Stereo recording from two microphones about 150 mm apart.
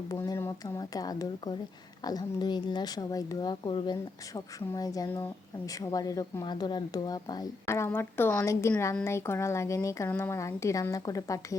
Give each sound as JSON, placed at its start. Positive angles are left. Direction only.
{"t": 0.1, "sound": "speech", "side_deg": 20}